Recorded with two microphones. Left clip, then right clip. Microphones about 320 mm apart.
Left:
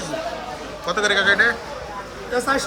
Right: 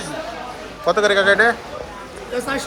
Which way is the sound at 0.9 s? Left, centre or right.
Centre.